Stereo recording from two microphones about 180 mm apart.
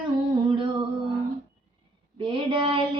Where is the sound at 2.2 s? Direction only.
30° right (ahead or behind).